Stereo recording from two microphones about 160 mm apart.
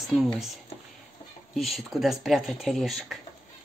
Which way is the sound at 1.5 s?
Centre (ahead or behind).